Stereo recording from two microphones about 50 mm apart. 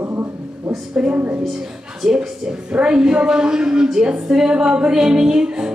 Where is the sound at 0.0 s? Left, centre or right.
Right.